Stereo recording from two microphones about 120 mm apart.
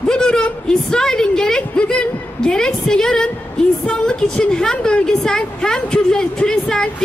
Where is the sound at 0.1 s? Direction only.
5° left (ahead or behind).